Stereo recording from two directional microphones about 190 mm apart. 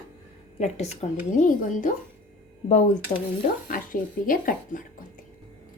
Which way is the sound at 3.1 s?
30° left (ahead or behind).